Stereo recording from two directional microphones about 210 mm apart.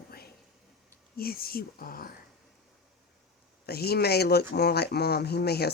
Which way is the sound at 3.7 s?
50° left (ahead or behind).